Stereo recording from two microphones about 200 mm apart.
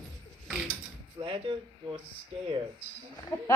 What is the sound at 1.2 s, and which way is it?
Speech, 25° right (ahead or behind).